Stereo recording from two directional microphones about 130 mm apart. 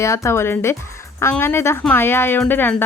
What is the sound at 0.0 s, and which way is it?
Speech, 20° left (ahead or behind).